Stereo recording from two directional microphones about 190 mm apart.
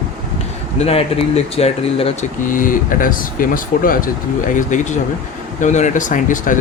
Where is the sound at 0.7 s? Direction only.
30° left (ahead or behind).